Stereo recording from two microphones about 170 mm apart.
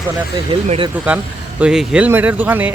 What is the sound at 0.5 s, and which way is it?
Speech, 30° right (ahead or behind).